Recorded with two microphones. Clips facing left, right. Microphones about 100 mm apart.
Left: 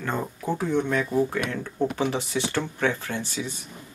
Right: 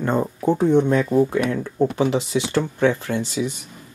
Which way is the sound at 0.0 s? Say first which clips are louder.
Right 8 dB; 30° right (ahead or behind).